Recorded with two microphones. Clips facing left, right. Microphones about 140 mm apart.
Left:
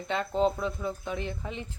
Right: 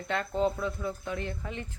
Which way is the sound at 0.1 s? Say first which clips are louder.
Left 2 dB; 20° left (ahead or behind).